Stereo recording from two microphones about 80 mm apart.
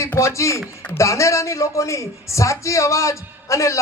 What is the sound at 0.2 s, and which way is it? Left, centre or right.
A man's voice, left.